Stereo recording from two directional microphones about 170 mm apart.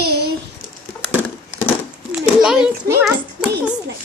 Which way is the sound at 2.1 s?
5° right (ahead or behind).